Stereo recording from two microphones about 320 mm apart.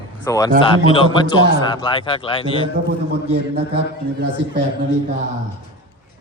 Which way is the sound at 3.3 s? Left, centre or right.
Right.